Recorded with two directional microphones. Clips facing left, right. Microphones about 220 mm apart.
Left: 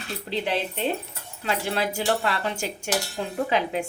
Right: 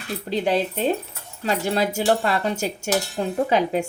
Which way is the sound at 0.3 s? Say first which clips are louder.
Right 5 dB; 40° right (ahead or behind).